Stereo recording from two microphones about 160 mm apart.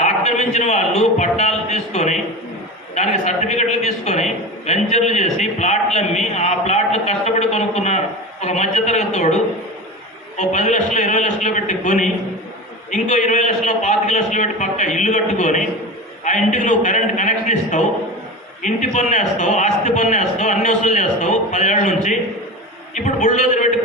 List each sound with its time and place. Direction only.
0.0 s a man's voice: 45° left (ahead or behind)